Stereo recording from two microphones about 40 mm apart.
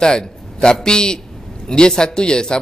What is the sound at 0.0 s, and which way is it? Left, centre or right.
A man's voice, centre.